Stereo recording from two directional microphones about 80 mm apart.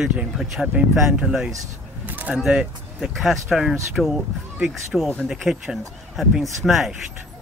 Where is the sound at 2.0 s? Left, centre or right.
Right.